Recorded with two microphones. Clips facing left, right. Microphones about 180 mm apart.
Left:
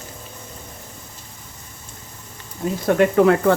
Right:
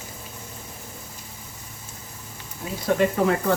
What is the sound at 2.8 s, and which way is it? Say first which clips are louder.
Speech: left 6 dB; 60° left (ahead or behind).